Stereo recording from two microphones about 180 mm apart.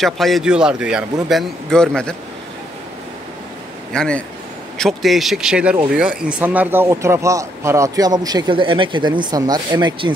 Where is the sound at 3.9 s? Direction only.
5° left (ahead or behind).